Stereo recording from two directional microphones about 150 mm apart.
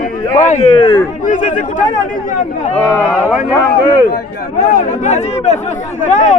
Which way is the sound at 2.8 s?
20° left (ahead or behind).